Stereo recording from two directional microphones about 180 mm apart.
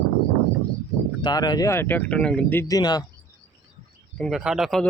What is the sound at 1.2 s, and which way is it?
Speech, 25° left (ahead or behind).